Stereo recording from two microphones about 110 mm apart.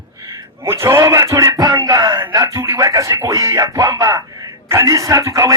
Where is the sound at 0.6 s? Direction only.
25° right (ahead or behind).